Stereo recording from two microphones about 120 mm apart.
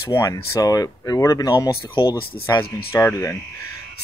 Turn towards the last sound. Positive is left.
turn(degrees=30)  # may be behind; listen again after turning